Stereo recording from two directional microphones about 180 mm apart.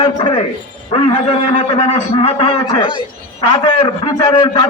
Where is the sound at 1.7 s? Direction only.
35° left (ahead or behind).